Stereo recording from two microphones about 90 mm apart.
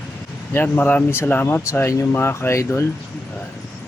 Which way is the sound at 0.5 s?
20° left (ahead or behind).